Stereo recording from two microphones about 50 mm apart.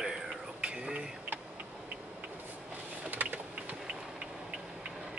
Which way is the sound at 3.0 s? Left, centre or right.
Right.